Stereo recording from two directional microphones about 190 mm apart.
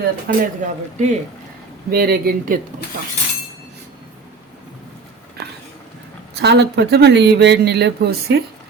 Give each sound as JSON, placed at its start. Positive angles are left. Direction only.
{"t": 0.3, "sound": "speech", "side_deg": -40}
{"t": 1.9, "sound": "speech", "side_deg": -55}
{"t": 6.4, "sound": "speech", "side_deg": -65}